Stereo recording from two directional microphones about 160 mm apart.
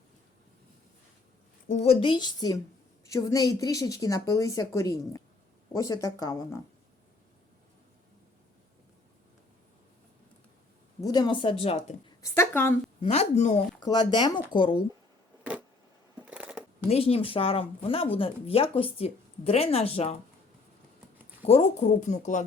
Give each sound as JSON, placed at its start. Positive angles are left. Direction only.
{"t": 1.6, "sound": "a woman's voice", "side_deg": 45}
{"t": 11.0, "sound": "speech", "side_deg": 25}
{"t": 12.2, "sound": "speech", "side_deg": 15}
{"t": 13.0, "sound": "speech", "side_deg": 40}
{"t": 13.8, "sound": "a woman's voice", "side_deg": 30}
{"t": 16.2, "sound": "scissors", "side_deg": -5}
{"t": 16.9, "sound": "speech", "side_deg": 35}
{"t": 21.4, "sound": "speech", "side_deg": 40}